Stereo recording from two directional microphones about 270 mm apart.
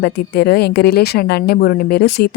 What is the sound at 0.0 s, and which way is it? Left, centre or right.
A woman's voice, left.